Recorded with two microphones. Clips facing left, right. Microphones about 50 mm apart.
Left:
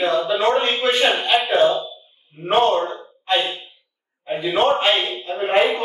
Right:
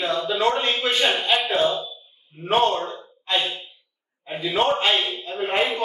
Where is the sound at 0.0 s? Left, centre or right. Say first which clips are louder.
Left 5 dB; left.